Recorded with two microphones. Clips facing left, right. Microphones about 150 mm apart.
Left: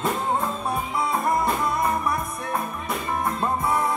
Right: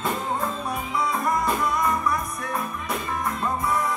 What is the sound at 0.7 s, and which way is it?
Music, 25° left (ahead or behind).